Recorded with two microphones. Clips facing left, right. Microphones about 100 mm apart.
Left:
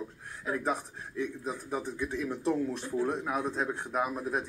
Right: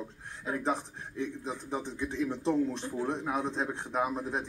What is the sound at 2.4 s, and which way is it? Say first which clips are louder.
Speech: right 1 dB; 25° right (ahead or behind).